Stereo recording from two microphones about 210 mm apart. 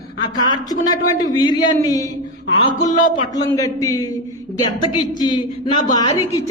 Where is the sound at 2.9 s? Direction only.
40° left (ahead or behind).